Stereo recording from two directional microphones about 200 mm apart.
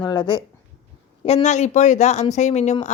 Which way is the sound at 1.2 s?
35° left (ahead or behind).